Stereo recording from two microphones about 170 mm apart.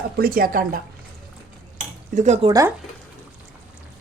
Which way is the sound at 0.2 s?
60° right (ahead or behind).